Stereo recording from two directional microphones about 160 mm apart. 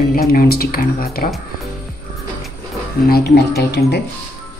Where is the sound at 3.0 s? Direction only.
85° left.